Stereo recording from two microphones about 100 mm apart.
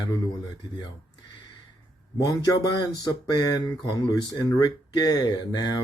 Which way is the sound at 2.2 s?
40° left (ahead or behind).